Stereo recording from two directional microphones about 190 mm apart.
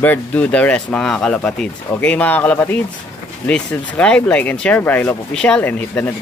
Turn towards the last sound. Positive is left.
turn(degrees=10)  # may be behind; listen again after turning